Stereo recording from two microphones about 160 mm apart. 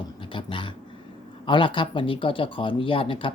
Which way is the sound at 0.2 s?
30° left (ahead or behind).